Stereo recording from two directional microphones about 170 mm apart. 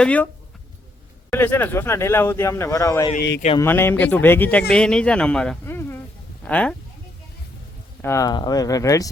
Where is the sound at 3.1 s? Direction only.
85° left.